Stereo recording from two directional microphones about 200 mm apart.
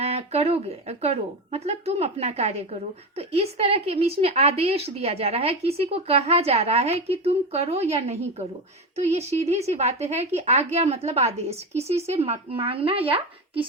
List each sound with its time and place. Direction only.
0.0 s speech: 30° right (ahead or behind)